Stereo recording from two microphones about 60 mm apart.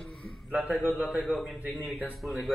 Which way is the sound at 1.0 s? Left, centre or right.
Centre.